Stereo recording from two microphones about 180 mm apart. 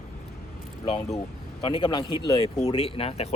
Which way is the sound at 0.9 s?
25° left (ahead or behind).